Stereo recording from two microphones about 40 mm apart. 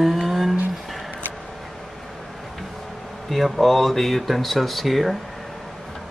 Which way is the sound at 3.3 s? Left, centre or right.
Centre.